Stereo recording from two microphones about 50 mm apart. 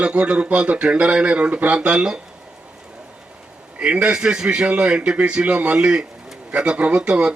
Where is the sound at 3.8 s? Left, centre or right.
Right.